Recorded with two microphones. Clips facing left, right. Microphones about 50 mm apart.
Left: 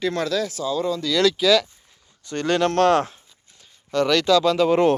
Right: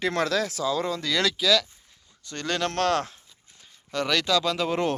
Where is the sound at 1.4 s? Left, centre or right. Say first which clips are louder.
Left 5 dB; centre.